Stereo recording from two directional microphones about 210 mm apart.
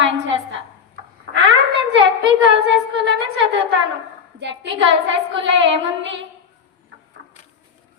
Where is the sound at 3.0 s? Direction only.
60° right (ahead or behind).